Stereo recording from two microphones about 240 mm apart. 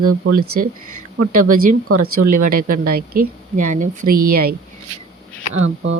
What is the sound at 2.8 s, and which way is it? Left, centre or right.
A woman's voice, right.